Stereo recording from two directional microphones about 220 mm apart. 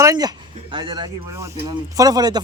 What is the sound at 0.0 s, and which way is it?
Speech, 15° right (ahead or behind).